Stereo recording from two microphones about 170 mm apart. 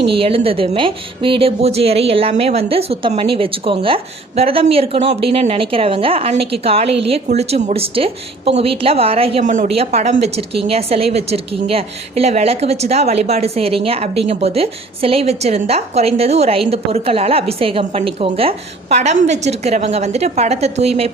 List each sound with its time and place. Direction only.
0.1 s a woman's voice: 30° right (ahead or behind)
9.4 s a woman's voice: 45° right (ahead or behind)